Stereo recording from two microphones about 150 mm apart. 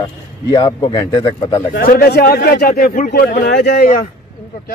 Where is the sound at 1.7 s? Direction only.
80° left.